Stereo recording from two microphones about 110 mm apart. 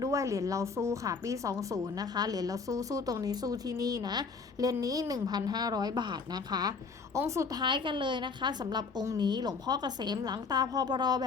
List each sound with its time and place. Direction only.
0.0 s a woman's voice: 30° right (ahead or behind)
7.6 s a woman's voice: 45° right (ahead or behind)